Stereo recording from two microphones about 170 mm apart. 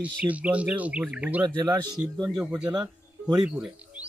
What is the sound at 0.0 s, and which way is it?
Bird, 10° right (ahead or behind).